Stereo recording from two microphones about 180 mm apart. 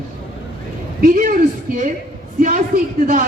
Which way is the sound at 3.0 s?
45° right (ahead or behind).